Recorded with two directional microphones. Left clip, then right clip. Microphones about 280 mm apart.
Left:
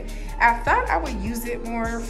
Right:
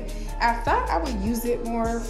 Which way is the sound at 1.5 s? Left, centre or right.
Centre.